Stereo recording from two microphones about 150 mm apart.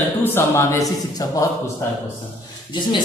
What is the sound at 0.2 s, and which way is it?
Speech, 15° left (ahead or behind).